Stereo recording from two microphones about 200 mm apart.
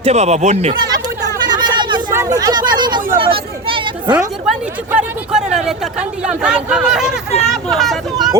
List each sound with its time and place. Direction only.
0.0 s speech: 35° right (ahead or behind)
1.4 s chatter: 20° right (ahead or behind)
2.1 s speech: 15° right (ahead or behind)
3.3 s a sound: 25° right (ahead or behind)
4.4 s speech: 5° right (ahead or behind)
7.5 s vehicle: centre (ahead or behind)